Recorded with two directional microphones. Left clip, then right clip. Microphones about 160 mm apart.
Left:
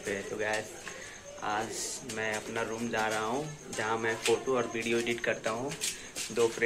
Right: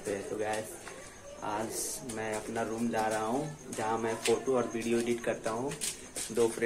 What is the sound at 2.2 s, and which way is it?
Speech, 5° right (ahead or behind).